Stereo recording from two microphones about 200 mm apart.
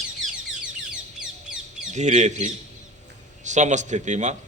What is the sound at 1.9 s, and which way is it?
A man's voice, 35° right (ahead or behind).